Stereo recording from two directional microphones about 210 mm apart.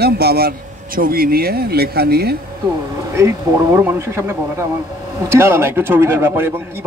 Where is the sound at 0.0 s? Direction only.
50° right (ahead or behind).